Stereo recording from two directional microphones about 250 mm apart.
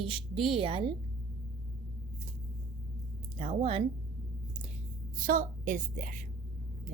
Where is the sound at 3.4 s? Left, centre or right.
Right.